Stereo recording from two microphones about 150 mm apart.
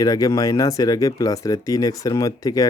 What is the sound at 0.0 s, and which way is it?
Speech, 25° left (ahead or behind).